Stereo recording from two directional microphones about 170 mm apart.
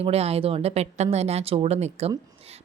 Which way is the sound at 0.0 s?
35° right (ahead or behind).